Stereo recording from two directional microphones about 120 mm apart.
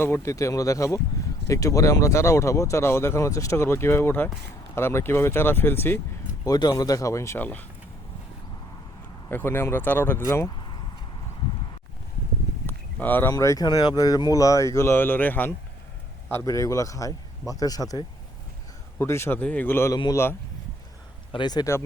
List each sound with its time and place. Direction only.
0.0 s speech: 25° left (ahead or behind)
6.4 s speech: 30° left (ahead or behind); by 7.6 s 15° left (ahead or behind)
9.3 s speech: 20° left (ahead or behind)
12.6 s a sound: 15° left (ahead or behind)
13.3 s speech: 30° left (ahead or behind)
16.3 s speech: 25° left (ahead or behind)
21.3 s speech: 35° left (ahead or behind)